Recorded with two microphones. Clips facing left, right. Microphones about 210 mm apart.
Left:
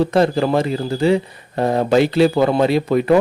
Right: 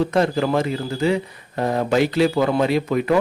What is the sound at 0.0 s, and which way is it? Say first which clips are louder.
A man's voice: left 3 dB; 35° left (ahead or behind).